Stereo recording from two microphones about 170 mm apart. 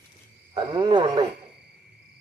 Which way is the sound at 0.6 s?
25° right (ahead or behind).